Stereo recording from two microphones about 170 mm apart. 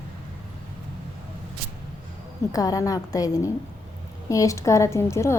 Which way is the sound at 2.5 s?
20° left (ahead or behind).